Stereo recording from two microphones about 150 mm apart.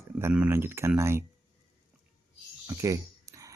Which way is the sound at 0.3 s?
10° right (ahead or behind).